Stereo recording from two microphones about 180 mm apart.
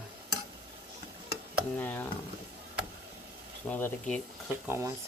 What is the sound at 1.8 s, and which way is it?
Speech, 10° left (ahead or behind).